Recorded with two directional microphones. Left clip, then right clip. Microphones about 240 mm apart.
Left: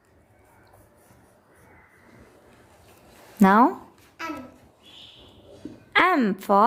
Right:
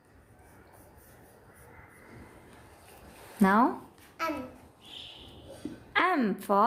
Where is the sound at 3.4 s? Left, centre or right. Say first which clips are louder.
Left 7 dB; left.